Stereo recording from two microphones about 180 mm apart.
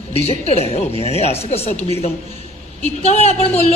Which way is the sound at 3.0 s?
35° left (ahead or behind).